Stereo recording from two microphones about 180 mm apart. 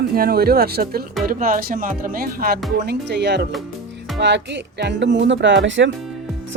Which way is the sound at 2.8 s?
70° right (ahead or behind).